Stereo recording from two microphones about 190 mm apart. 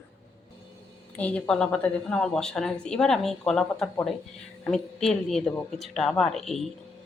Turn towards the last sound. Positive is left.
turn(degrees=0)  # may be behind; listen again after turning